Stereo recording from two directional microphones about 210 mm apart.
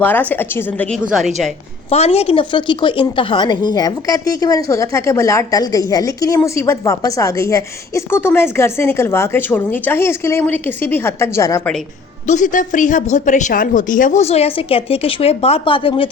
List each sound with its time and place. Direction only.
0.0 s a woman's voice: 10° left (ahead or behind)
1.9 s a woman's voice: 30° left (ahead or behind)
12.3 s speech: 35° left (ahead or behind)